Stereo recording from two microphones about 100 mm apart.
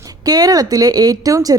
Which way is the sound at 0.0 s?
40° right (ahead or behind).